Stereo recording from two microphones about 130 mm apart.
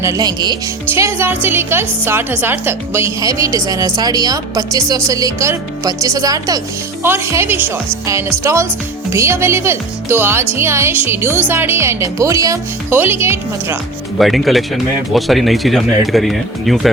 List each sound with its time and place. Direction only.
0.0 s speech: 25° right (ahead or behind)
0.9 s a woman's voice: 20° right (ahead or behind)
14.2 s speech: centre (ahead or behind)